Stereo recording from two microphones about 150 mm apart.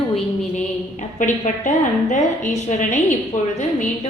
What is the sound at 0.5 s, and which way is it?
A woman's voice, 55° left (ahead or behind).